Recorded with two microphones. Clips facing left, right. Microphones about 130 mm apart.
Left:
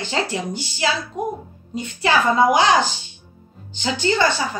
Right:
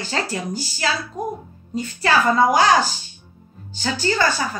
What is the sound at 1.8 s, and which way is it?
A woman's voice, 20° left (ahead or behind).